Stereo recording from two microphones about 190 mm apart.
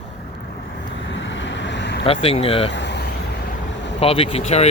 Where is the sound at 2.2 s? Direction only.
30° left (ahead or behind).